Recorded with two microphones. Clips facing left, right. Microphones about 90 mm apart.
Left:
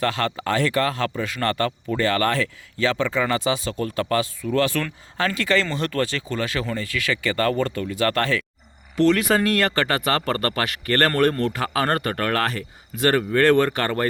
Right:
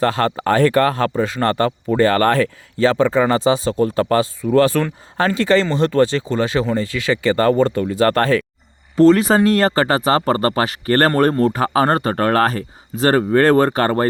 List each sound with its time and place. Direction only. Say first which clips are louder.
0.0 s speech: right 6 dB; 35° right (ahead or behind)